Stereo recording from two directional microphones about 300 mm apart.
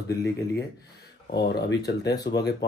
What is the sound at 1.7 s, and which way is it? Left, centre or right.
Speech, left.